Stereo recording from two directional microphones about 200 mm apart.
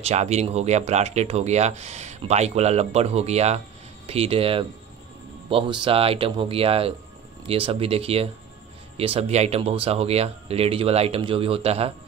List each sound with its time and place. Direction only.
0.0 s speech: 35° right (ahead or behind)